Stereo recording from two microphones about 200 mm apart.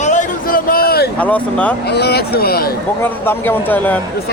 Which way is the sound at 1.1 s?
10° left (ahead or behind).